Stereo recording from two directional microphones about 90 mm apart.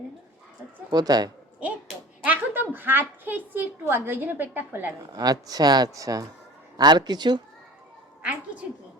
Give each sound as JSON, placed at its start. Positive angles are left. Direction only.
{"t": 0.9, "sound": "speech", "side_deg": -45}
{"t": 1.5, "sound": "basketball bounce", "side_deg": -15}
{"t": 2.2, "sound": "a woman's voice", "side_deg": -20}
{"t": 5.1, "sound": "speech", "side_deg": -45}
{"t": 6.7, "sound": "speech", "side_deg": -50}
{"t": 8.2, "sound": "a woman's voice", "side_deg": -15}